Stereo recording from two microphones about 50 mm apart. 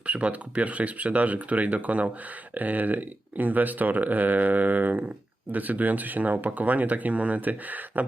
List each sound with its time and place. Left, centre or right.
0.0 s speech: right